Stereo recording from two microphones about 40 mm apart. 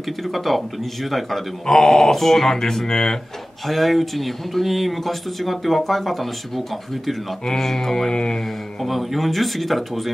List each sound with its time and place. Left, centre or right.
0.3 s speech: centre
1.7 s speech: centre
8.1 s mantra: centre
8.8 s speech: centre